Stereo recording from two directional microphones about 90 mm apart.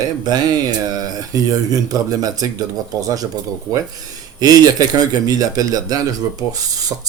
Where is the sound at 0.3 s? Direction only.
45° right (ahead or behind).